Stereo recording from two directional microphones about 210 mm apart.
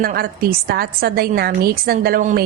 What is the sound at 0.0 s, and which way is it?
A woman's voice, 45° right (ahead or behind).